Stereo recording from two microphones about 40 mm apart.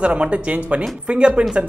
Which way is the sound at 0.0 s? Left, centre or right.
Right.